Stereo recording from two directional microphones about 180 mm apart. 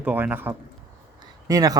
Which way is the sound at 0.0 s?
10° right (ahead or behind).